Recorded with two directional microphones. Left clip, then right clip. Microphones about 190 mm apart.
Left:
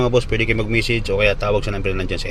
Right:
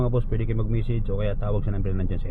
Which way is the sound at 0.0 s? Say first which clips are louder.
Left 11 dB; 10° left (ahead or behind).